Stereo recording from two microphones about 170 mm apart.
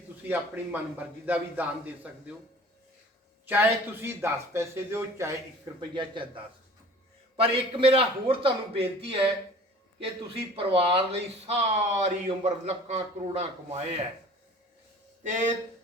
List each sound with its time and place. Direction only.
0.3 s speech: 10° right (ahead or behind)
3.4 s speech: 10° right (ahead or behind); by 13.8 s 40° right (ahead or behind)